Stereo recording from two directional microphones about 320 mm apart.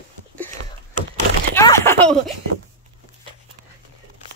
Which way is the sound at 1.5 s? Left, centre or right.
Centre.